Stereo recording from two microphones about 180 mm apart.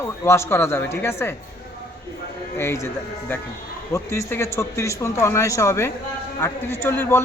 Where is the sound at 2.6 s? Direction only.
15° left (ahead or behind).